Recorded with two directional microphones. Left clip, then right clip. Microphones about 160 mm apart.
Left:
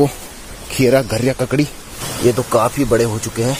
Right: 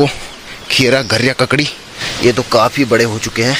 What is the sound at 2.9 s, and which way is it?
Speech, 5° left (ahead or behind).